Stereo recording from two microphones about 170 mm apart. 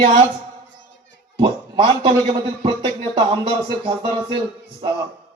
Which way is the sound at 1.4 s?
30° right (ahead or behind).